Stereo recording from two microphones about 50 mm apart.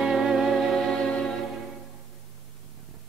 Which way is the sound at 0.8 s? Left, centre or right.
Centre.